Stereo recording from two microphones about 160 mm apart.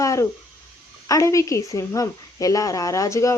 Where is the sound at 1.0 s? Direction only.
20° left (ahead or behind).